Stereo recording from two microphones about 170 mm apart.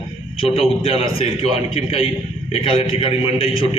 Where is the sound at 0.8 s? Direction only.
35° left (ahead or behind).